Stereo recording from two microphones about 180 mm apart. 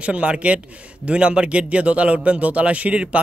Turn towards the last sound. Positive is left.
turn(degrees=-5)  # may be behind; listen again after turning